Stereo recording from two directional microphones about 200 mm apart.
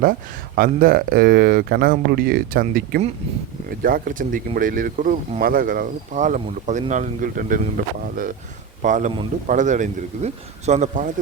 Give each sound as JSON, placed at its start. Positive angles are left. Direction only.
{"t": 0.0, "sound": "speech", "side_deg": -45}